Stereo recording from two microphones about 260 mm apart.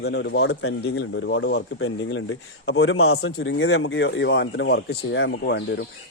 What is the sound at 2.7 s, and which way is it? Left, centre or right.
A man's voice, left.